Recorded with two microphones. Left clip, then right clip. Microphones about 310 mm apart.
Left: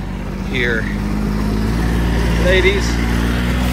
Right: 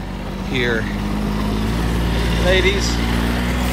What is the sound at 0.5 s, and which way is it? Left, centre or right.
Speech, centre.